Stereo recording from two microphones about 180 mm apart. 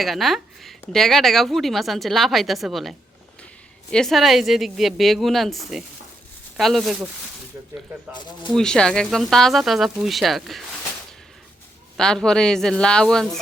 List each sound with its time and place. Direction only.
0.0 s speech: centre (ahead or behind)
3.9 s speech: centre (ahead or behind)
8.1 s speech: 25° left (ahead or behind)
8.5 s speech: 5° left (ahead or behind)
11.9 s speech: 5° left (ahead or behind)